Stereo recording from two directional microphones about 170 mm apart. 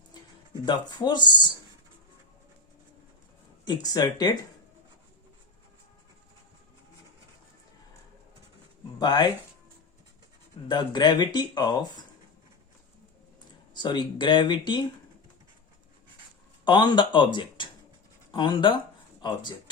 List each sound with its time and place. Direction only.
0.6 s speech: 25° left (ahead or behind)
3.7 s speech: 25° left (ahead or behind)
9.0 s speech: 25° left (ahead or behind)
10.7 s speech: 25° left (ahead or behind)
13.7 s speech: 25° left (ahead or behind)
16.6 s speech: 30° left (ahead or behind)